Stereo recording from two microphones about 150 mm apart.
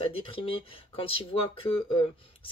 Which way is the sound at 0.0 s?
40° left (ahead or behind).